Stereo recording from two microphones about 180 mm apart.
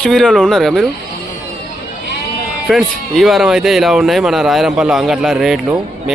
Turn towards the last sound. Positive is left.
turn(degrees=-5)  # may be behind; listen again after turning